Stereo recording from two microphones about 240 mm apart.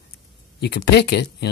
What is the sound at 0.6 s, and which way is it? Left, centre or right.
Speech, left.